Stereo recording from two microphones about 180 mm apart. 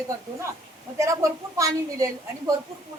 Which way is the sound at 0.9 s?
15° right (ahead or behind).